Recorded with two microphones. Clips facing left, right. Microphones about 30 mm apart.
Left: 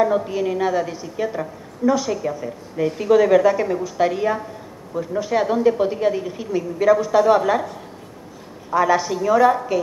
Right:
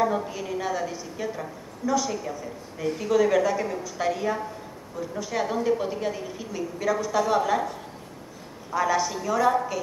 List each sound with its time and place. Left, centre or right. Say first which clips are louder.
0.0 s a woman's voice: left 7 dB; centre
8.7 s a woman's voice: left 6 dB; centre